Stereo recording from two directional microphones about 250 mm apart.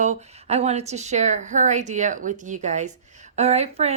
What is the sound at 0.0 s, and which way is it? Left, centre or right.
Speech, right.